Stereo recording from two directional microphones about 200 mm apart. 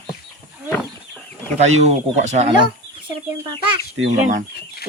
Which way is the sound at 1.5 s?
35° right (ahead or behind).